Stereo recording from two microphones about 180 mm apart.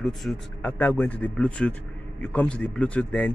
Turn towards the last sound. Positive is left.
turn(degrees=10)  # may be behind; listen again after turning